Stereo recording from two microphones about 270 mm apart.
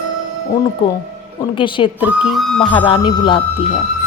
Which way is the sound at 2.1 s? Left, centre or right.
Centre.